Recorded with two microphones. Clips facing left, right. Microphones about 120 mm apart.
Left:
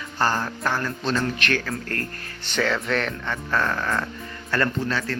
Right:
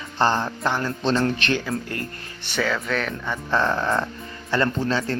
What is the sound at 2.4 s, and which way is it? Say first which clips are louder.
Speech: left 1 dB; 5° right (ahead or behind).